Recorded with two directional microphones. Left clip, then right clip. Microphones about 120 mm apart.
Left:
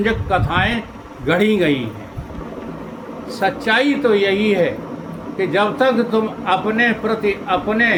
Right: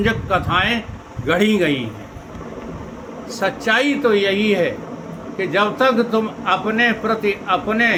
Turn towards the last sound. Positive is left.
turn(degrees=-30)  # may be behind; listen again after turning